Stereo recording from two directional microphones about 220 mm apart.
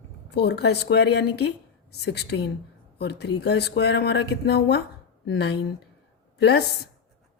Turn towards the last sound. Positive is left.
turn(degrees=50)  # may be behind; listen again after turning